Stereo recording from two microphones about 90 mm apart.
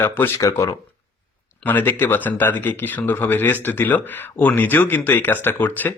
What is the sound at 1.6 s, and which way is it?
Speech, 20° left (ahead or behind).